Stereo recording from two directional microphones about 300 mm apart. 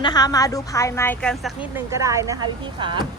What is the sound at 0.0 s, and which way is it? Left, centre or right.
A woman's voice, centre.